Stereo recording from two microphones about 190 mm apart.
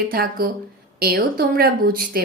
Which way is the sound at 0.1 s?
50° right (ahead or behind).